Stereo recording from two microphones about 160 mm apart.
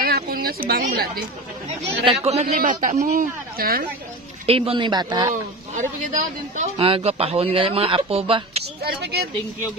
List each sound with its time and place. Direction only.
0.0 s speech: 70° right (ahead or behind)
2.0 s speech: 40° right (ahead or behind); by 3.8 s 65° right (ahead or behind)
4.5 s speech: 35° right (ahead or behind)
5.3 s speech: 50° right (ahead or behind)
6.8 s speech: 40° right (ahead or behind)
9.0 s speech: 90° right